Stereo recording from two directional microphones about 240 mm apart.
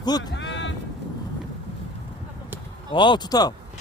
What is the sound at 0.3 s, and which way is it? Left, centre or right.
Music, left.